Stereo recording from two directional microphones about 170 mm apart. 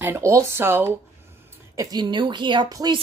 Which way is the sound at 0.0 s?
15° right (ahead or behind).